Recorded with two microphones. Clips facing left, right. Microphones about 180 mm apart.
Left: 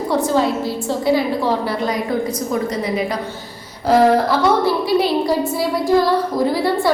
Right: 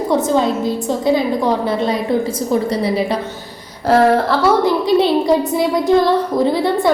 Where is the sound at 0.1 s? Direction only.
20° right (ahead or behind).